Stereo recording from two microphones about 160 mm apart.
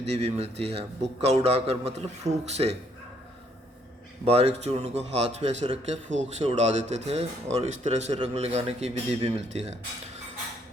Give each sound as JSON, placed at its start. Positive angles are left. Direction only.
{"t": 0.0, "sound": "speech", "side_deg": -40}
{"t": 4.3, "sound": "a man's voice", "side_deg": -40}